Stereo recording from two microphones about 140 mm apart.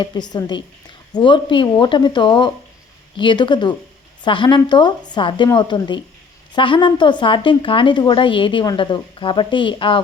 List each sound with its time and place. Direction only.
0.0 s speech: 30° left (ahead or behind)